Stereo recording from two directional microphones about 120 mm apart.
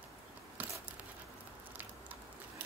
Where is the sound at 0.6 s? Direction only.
15° right (ahead or behind).